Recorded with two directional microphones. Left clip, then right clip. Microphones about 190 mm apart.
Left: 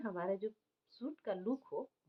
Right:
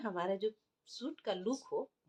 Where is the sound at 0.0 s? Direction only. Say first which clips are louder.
Right 3 dB; 25° right (ahead or behind).